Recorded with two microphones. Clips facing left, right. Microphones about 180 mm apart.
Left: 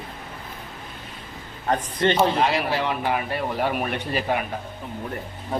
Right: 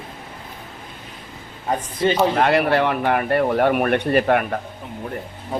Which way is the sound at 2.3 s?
60° right (ahead or behind).